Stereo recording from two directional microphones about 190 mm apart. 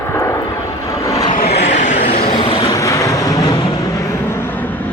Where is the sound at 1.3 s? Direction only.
40° left (ahead or behind).